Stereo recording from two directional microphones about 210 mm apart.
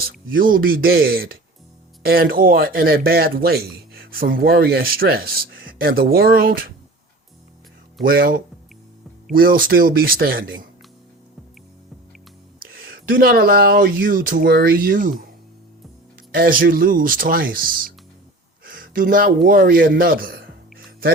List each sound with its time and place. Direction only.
0.0 s speech: 45° right (ahead or behind)
8.0 s speech: 45° right (ahead or behind)
12.7 s speech: 50° right (ahead or behind)
16.3 s a man's voice: 45° right (ahead or behind)